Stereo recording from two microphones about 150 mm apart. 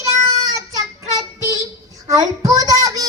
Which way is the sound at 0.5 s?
25° right (ahead or behind).